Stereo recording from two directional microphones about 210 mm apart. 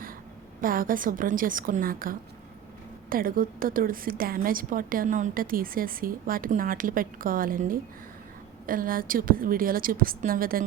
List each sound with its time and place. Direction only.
0.6 s a woman's voice: 40° right (ahead or behind)